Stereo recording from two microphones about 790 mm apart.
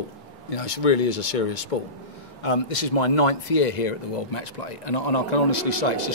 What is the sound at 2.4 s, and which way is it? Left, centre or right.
Speech, left.